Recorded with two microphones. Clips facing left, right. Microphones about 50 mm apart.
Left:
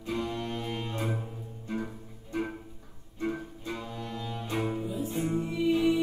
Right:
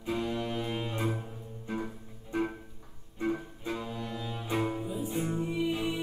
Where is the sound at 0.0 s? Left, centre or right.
Centre.